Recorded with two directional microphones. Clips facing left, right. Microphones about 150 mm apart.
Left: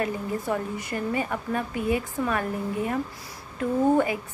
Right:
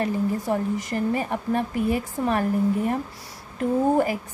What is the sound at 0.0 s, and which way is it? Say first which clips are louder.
A woman's voice: right 4 dB; 35° right (ahead or behind).